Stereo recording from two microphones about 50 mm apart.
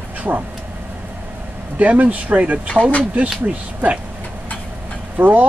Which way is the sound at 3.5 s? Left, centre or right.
Right.